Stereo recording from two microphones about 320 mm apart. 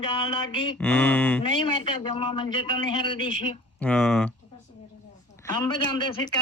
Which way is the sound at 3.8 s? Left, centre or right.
Centre.